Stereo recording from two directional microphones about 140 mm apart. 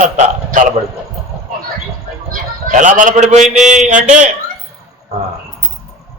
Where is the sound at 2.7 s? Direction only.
65° right (ahead or behind).